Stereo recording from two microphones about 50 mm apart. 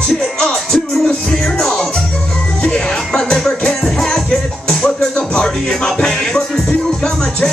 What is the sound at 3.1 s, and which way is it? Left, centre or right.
Music, centre.